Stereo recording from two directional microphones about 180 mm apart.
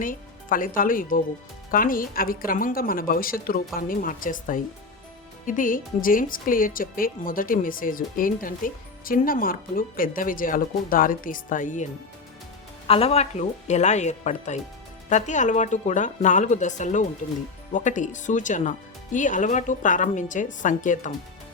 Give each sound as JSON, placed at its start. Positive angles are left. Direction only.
{"t": 0.0, "sound": "speech", "side_deg": 50}
{"t": 12.9, "sound": "speech", "side_deg": 35}